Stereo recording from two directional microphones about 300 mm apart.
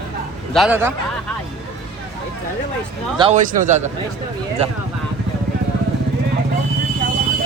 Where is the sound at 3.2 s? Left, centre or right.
Right.